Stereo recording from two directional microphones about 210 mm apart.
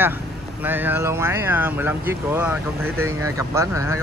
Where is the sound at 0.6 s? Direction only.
10° right (ahead or behind).